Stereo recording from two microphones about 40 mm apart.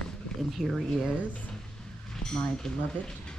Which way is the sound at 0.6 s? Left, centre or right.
Centre.